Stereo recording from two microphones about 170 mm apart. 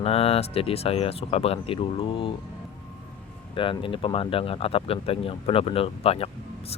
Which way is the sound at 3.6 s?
30° left (ahead or behind).